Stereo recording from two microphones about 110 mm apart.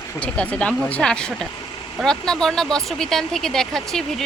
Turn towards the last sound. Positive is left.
turn(degrees=5)  # may be behind; listen again after turning